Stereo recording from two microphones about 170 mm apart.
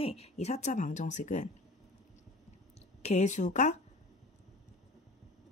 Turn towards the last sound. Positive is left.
turn(degrees=45)  # may be behind; listen again after turning